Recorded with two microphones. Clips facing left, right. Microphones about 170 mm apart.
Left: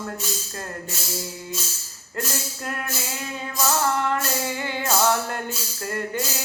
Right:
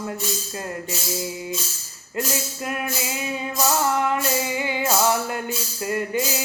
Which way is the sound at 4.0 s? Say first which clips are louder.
Right 2 dB; 10° right (ahead or behind).